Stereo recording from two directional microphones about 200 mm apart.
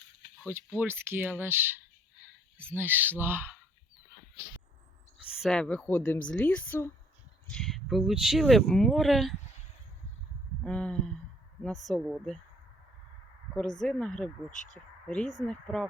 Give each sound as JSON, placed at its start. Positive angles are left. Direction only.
{"t": 0.4, "sound": "speech", "side_deg": -10}
{"t": 5.1, "sound": "a woman's voice", "side_deg": 0}
{"t": 10.6, "sound": "speech", "side_deg": 5}
{"t": 13.7, "sound": "speech", "side_deg": 5}
{"t": 14.5, "sound": "speech", "side_deg": 40}
{"t": 15.0, "sound": "speech", "side_deg": 5}